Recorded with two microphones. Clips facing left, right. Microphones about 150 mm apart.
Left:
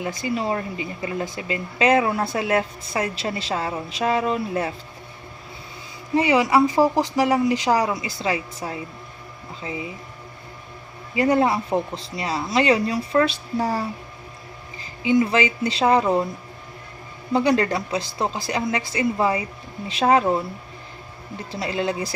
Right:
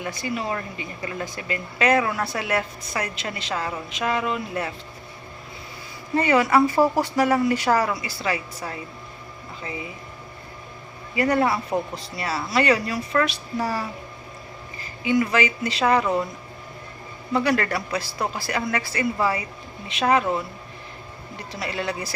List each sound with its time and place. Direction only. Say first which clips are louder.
0.0 s speech: left 3 dB; 25° left (ahead or behind)
6.1 s speech: left 1 dB; 15° left (ahead or behind)
11.1 s speech: left 2 dB; 20° left (ahead or behind)
15.0 s speech: left 2 dB; 25° left (ahead or behind)
17.3 s speech: left 3 dB; 25° left (ahead or behind)
21.5 s speech: left 4 dB; 25° left (ahead or behind)